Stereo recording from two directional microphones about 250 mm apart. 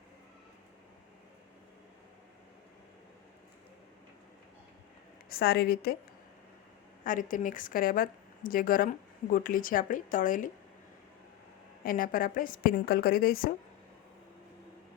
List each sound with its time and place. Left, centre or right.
5.3 s a woman's voice: left
7.0 s a woman's voice: left
11.8 s a woman's voice: left